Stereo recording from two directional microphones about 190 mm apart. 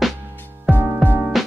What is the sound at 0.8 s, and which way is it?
Music, 10° right (ahead or behind).